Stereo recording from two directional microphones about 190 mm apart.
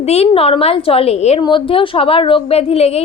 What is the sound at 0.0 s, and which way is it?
A woman's voice, 35° left (ahead or behind).